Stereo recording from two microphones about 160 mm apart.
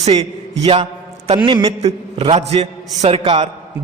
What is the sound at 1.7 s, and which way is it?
A woman's voice, 40° right (ahead or behind).